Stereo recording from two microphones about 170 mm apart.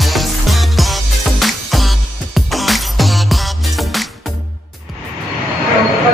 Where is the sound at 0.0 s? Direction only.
Centre (ahead or behind).